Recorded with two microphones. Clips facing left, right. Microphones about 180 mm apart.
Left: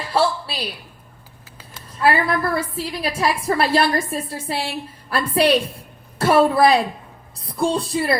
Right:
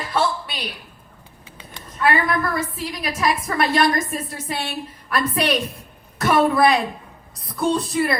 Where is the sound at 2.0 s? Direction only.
30° left (ahead or behind).